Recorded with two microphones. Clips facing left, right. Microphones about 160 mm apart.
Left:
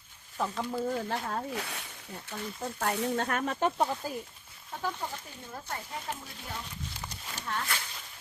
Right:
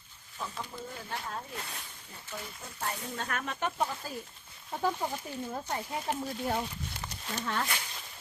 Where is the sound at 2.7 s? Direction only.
75° left (ahead or behind).